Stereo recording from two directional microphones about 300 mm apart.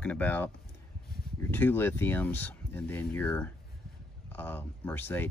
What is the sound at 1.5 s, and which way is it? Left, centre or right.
Speech, centre.